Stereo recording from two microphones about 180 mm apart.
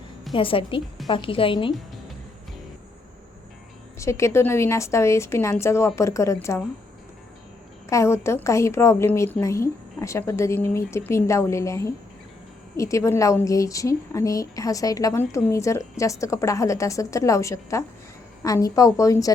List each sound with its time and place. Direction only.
0.3 s a woman's voice: 30° left (ahead or behind)
3.9 s a woman's voice: 15° left (ahead or behind)
7.9 s a woman's voice: 15° left (ahead or behind)